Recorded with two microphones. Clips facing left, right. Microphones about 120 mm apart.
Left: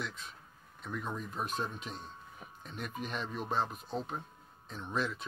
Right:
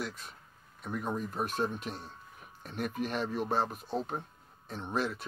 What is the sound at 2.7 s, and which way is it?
Speech, 55° right (ahead or behind).